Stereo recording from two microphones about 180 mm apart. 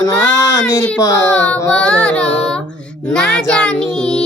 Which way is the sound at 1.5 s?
5° left (ahead or behind).